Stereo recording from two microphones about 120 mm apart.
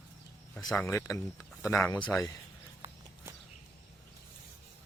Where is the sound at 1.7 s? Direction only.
10° left (ahead or behind).